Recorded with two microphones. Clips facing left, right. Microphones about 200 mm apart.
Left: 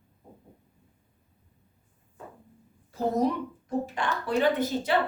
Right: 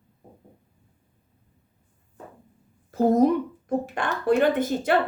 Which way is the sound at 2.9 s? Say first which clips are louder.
Right 7 dB; 50° right (ahead or behind).